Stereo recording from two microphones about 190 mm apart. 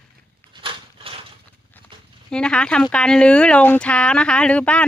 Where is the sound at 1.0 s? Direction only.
30° right (ahead or behind).